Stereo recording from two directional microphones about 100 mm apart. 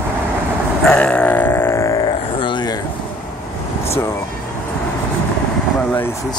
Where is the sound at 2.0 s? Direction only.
50° left (ahead or behind).